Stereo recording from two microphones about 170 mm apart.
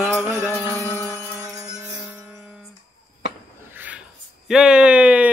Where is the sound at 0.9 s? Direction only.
15° right (ahead or behind).